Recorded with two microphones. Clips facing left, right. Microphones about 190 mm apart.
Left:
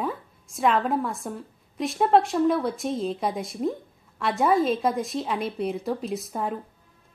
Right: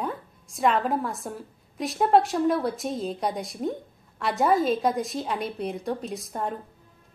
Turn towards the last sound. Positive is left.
turn(degrees=0)  # may be behind; listen again after turning